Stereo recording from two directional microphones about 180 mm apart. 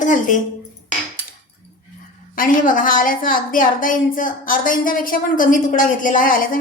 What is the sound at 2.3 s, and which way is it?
A woman's voice, 50° left (ahead or behind).